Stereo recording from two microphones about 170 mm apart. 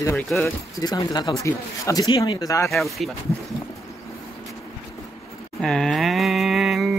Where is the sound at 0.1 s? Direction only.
5° left (ahead or behind).